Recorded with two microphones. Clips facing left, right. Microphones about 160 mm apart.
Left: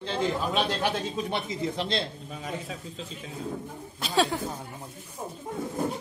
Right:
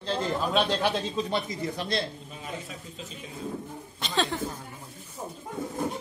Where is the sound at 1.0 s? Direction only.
20° left (ahead or behind).